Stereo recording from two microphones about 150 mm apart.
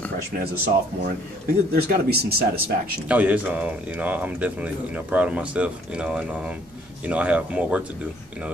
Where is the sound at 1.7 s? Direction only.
90° right.